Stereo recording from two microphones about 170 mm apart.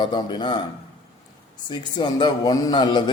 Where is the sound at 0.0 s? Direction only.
25° left (ahead or behind).